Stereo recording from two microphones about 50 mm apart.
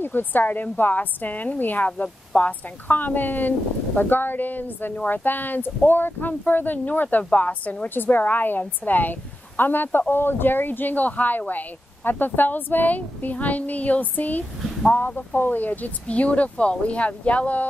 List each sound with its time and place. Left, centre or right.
0.0 s speech: left